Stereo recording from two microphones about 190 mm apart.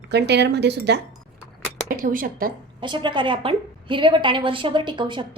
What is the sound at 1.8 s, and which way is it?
Speech, 45° right (ahead or behind).